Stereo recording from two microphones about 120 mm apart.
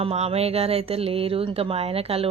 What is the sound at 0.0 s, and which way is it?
Speech, 55° right (ahead or behind).